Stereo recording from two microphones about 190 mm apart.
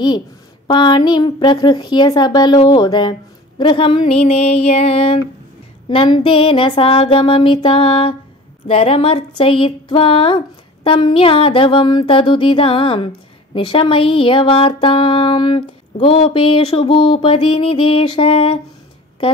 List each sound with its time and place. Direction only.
0.7 s speech: 25° left (ahead or behind)